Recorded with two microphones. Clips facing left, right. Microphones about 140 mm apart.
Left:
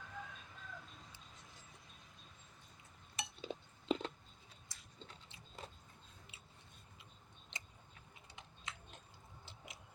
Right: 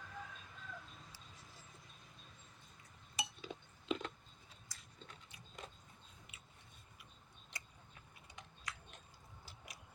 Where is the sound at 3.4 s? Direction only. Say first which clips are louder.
Left 5 dB; 30° left (ahead or behind).